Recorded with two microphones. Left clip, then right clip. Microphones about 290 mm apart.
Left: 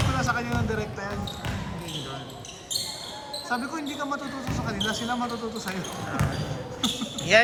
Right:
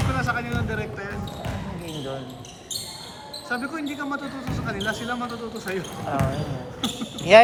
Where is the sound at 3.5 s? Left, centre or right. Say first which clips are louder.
Right 2 dB; centre.